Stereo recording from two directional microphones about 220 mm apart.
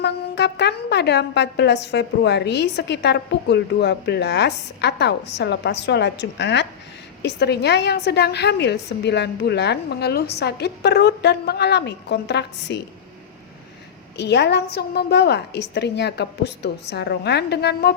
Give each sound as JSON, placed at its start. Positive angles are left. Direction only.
{"t": 0.0, "sound": "a woman's voice", "side_deg": 50}
{"t": 14.2, "sound": "a woman's voice", "side_deg": 50}